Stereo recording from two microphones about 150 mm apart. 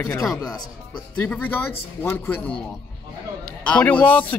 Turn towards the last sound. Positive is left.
turn(degrees=10)  # may be behind; listen again after turning